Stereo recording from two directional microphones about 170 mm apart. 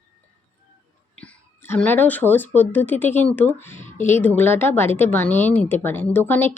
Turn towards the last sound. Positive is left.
turn(degrees=10)  # may be behind; listen again after turning